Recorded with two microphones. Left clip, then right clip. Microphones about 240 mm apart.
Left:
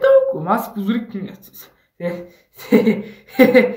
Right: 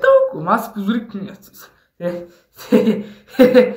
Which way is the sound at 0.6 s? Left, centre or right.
Right.